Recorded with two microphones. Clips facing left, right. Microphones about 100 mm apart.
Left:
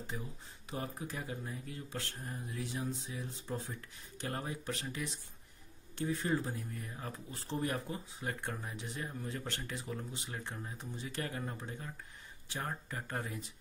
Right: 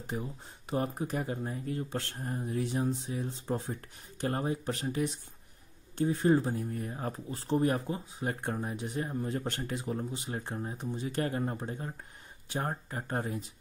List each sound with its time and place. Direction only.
0.1 s speech: 30° right (ahead or behind)
3.7 s speech: 45° right (ahead or behind)
4.4 s speech: 35° right (ahead or behind)